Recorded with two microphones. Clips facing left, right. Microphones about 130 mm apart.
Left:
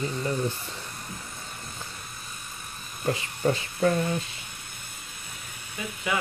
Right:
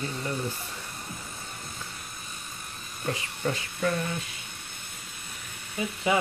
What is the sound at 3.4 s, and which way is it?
Speech, 35° left (ahead or behind).